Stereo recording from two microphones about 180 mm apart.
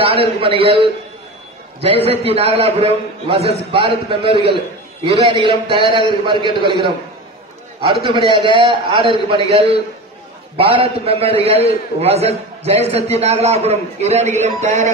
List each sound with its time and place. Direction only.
0.0 s a man's voice: 30° right (ahead or behind)
2.0 s a man's voice: 35° right (ahead or behind)
7.8 s a man's voice: 25° right (ahead or behind)